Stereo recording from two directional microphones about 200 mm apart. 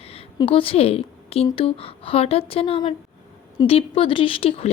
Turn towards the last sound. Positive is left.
turn(degrees=25)  # may be behind; listen again after turning